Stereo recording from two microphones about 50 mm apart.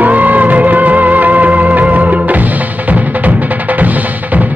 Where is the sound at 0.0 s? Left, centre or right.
Right.